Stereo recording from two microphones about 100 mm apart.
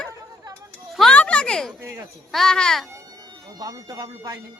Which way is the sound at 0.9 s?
10° left (ahead or behind).